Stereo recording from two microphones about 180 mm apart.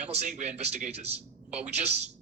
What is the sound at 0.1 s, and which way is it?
A man's voice, 40° right (ahead or behind).